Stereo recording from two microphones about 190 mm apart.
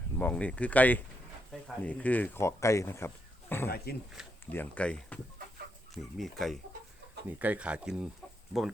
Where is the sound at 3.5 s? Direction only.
10° left (ahead or behind).